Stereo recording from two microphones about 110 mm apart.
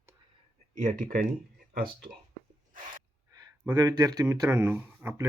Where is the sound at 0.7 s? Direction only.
90° right.